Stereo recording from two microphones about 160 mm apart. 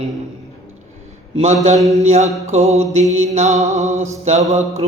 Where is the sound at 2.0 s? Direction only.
45° right (ahead or behind).